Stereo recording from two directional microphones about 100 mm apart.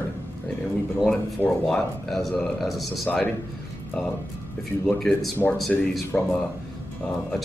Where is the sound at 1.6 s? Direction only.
5° left (ahead or behind).